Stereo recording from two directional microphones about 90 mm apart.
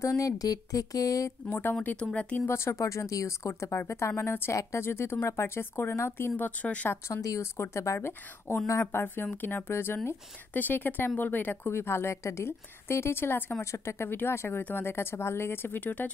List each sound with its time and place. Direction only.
0.0 s a woman's voice: 40° left (ahead or behind)
1.5 s speech: 25° left (ahead or behind)
2.4 s a woman's voice: 30° left (ahead or behind)
7.1 s a woman's voice: 35° left (ahead or behind)
8.9 s speech: 25° left (ahead or behind)